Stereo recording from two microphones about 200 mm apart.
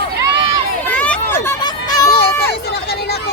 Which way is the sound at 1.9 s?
20° left (ahead or behind).